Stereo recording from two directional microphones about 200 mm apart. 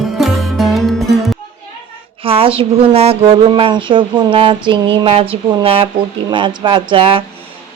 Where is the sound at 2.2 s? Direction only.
30° right (ahead or behind).